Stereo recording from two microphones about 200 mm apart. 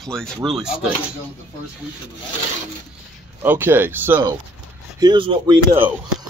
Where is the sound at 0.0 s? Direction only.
5° left (ahead or behind).